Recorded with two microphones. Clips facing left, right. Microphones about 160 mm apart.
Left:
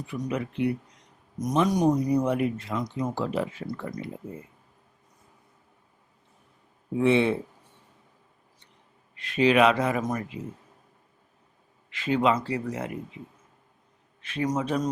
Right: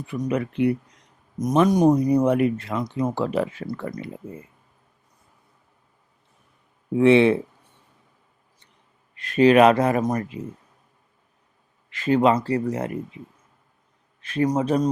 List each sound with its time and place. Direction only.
0.1 s speech: 60° right (ahead or behind)
1.4 s speech: 50° right (ahead or behind); by 4.1 s 65° right (ahead or behind)
7.0 s speech: 80° right
9.1 s speech: 45° right (ahead or behind)
11.9 s speech: 45° right (ahead or behind)
14.2 s a man's voice: 40° right (ahead or behind)